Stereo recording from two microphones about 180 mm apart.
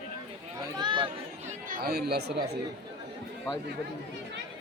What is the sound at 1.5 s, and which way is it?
Speech, 50° right (ahead or behind).